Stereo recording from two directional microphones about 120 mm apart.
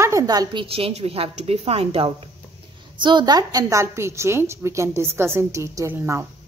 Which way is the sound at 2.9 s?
40° right (ahead or behind).